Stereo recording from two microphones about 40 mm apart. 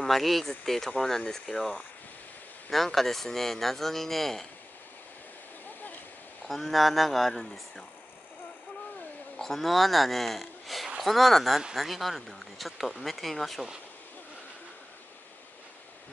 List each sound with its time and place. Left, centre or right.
0.0 s speech: centre
2.7 s speech: centre
6.4 s speech: centre
9.4 s speech: centre